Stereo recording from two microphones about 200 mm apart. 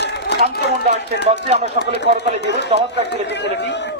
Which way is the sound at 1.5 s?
35° right (ahead or behind).